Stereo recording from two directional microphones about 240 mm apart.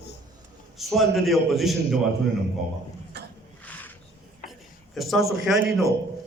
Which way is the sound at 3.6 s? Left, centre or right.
Centre.